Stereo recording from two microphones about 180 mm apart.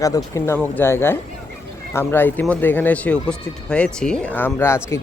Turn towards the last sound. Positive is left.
turn(degrees=15)  # may be behind; listen again after turning